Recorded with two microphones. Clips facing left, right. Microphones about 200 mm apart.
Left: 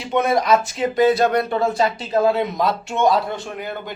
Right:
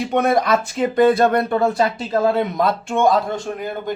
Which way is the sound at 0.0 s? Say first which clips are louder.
Right 2 dB; 55° right (ahead or behind).